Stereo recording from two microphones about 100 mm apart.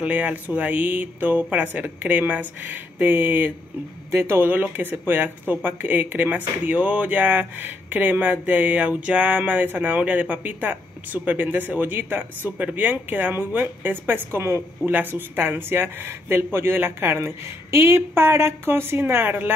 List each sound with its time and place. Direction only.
0.0 s speech: 15° right (ahead or behind)